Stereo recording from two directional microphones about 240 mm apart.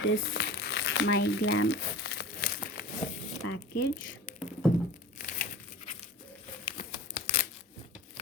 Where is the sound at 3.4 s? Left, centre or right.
Left.